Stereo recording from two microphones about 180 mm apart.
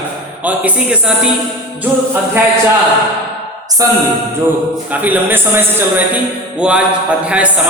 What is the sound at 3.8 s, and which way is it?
Speech, 20° right (ahead or behind).